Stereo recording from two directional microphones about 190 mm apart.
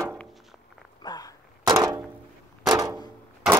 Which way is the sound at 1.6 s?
15° right (ahead or behind).